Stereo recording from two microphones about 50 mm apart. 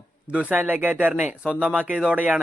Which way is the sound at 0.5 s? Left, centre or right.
Right.